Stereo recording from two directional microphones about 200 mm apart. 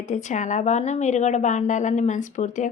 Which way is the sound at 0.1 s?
35° left (ahead or behind).